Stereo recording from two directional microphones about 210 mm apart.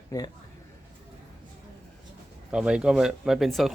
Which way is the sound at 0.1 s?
15° left (ahead or behind).